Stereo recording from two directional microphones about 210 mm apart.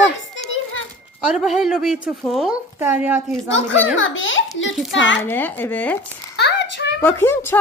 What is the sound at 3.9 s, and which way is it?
Speech, 70° left (ahead or behind).